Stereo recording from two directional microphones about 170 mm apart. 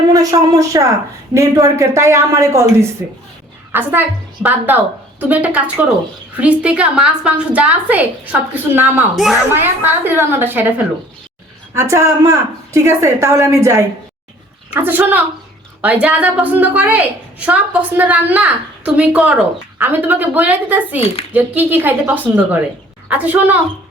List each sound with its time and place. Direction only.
0.1 s a woman's voice: 20° right (ahead or behind); by 9.4 s centre (ahead or behind)
9.5 s a woman's voice: 10° right (ahead or behind)